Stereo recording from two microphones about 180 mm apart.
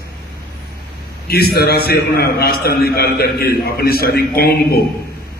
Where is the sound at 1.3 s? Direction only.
60° left (ahead or behind).